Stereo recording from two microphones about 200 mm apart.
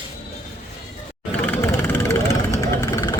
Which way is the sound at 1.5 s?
10° left (ahead or behind).